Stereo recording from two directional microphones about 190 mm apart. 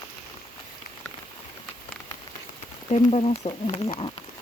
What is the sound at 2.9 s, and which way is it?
Speech, 30° left (ahead or behind).